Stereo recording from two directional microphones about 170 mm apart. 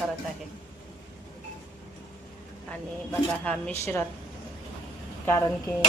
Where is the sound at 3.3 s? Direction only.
5° left (ahead or behind).